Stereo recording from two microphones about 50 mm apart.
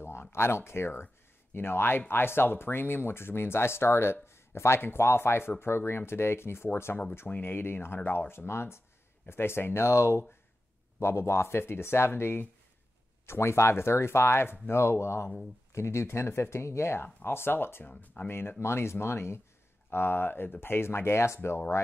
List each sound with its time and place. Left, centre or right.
0.0 s speech: left
7.2 s speech: left
13.3 s speech: left
17.8 s speech: left
18.6 s speech: left